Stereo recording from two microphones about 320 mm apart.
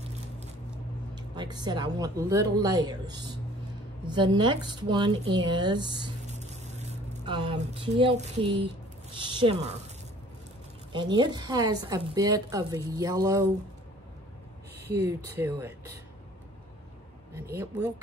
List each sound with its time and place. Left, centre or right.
1.1 s a woman's voice: centre
10.9 s a woman's voice: centre
15.0 s a woman's voice: centre